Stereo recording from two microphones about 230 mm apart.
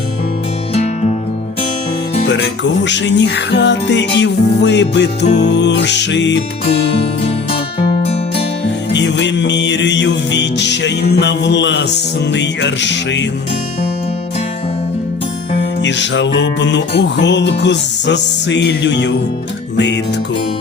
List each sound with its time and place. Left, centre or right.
0.7 s music: left
2.2 s music: left
7.3 s music: left
8.9 s music: left
15.8 s music: left